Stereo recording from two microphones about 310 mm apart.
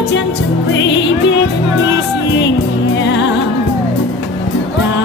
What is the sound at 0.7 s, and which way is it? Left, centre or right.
Music, left.